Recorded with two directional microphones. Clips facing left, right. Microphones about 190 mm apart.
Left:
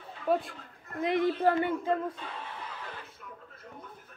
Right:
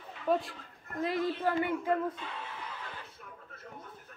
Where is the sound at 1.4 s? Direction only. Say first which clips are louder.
Left 4 dB; 30° left (ahead or behind).